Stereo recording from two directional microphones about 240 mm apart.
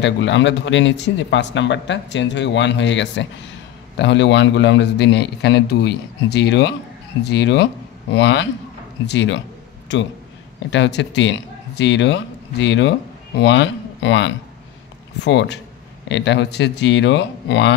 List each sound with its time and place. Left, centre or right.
0.0 s speech: left